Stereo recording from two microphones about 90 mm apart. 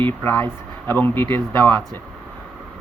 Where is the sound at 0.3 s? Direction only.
20° left (ahead or behind).